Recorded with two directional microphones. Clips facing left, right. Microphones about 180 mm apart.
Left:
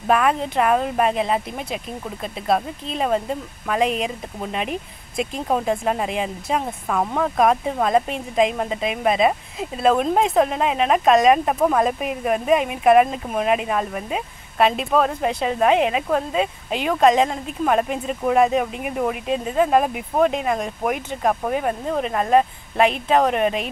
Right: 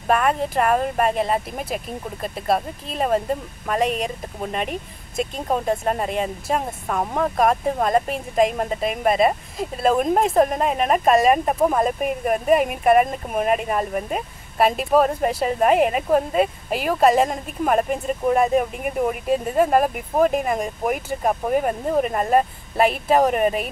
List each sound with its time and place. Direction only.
0.0 s speech: centre (ahead or behind)